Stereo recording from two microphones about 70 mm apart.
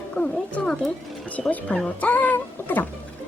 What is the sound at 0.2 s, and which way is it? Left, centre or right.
Speech, centre.